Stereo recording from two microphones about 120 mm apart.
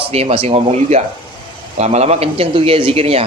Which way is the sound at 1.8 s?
65° right (ahead or behind).